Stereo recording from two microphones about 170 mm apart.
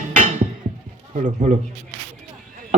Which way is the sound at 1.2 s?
45° right (ahead or behind).